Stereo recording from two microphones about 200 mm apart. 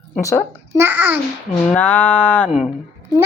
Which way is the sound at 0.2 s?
15° left (ahead or behind).